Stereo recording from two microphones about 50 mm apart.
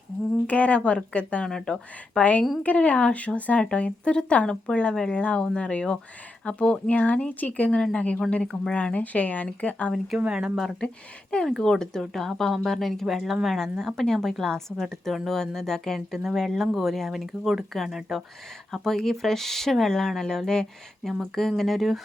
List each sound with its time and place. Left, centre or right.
0.4 s speech: left
1.5 s speech: centre
2.6 s speech: left
10.2 s speech: centre
10.8 s speech: centre
11.4 s a woman's voice: centre